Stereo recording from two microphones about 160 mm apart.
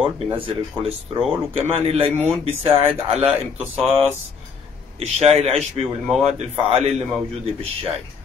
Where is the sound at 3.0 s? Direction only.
35° right (ahead or behind).